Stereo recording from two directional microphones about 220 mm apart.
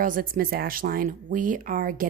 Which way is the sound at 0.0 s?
40° right (ahead or behind).